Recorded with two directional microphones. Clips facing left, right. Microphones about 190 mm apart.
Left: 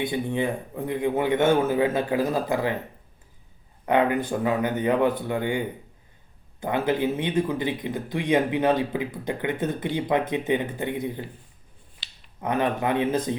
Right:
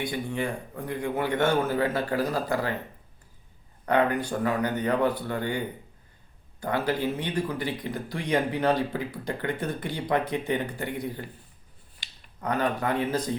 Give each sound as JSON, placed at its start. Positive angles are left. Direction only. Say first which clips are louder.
{"t": 0.0, "sound": "speech", "louder": "left 4 dB", "side_deg": 20}
{"t": 3.8, "sound": "speech", "louder": "left 2 dB", "side_deg": 20}
{"t": 12.0, "sound": "finger snapping", "louder": "right 2 dB", "side_deg": -45}
{"t": 12.4, "sound": "speech", "louder": "left 2 dB", "side_deg": 20}